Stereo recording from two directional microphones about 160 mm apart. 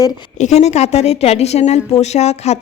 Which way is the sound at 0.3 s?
45° left (ahead or behind).